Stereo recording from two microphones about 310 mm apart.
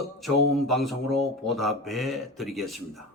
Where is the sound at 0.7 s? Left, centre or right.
Centre.